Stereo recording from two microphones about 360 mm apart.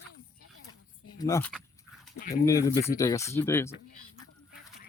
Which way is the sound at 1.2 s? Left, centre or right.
Centre.